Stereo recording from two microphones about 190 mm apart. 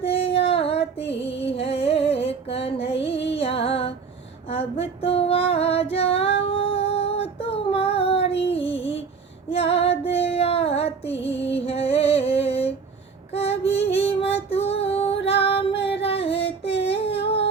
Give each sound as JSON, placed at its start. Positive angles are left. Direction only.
{"t": 0.0, "sound": "female singing", "side_deg": 30}
{"t": 0.5, "sound": "child singing", "side_deg": 30}
{"t": 1.5, "sound": "a sound", "side_deg": 30}
{"t": 3.0, "sound": "music", "side_deg": 30}
{"t": 4.4, "sound": "female singing", "side_deg": 30}
{"t": 8.4, "sound": "music", "side_deg": 30}
{"t": 9.5, "sound": "female singing", "side_deg": 30}
{"t": 15.4, "sound": "music", "side_deg": 30}
{"t": 16.0, "sound": "a sound", "side_deg": 30}